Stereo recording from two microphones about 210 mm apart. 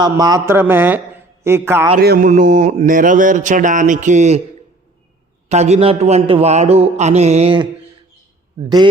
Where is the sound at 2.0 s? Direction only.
45° right (ahead or behind).